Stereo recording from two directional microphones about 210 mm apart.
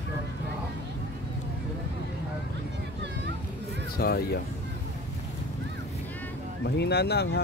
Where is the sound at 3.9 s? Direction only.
50° left (ahead or behind).